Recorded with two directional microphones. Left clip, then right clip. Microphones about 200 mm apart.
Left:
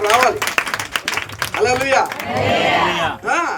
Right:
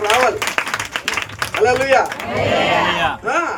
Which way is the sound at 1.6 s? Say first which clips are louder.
Right 2 dB; 45° left (ahead or behind).